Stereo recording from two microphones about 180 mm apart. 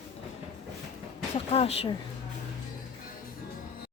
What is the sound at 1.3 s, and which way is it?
Speech, 35° left (ahead or behind).